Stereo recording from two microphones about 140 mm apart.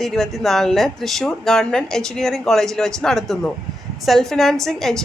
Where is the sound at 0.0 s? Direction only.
Centre (ahead or behind).